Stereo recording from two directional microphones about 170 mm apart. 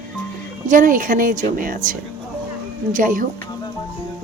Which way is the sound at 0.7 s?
50° right (ahead or behind).